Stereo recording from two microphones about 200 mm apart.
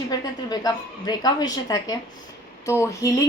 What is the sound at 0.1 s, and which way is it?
A woman's voice, 20° left (ahead or behind).